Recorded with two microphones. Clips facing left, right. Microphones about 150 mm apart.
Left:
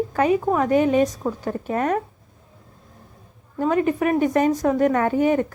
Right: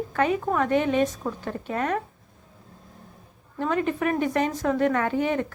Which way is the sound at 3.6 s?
40° left (ahead or behind).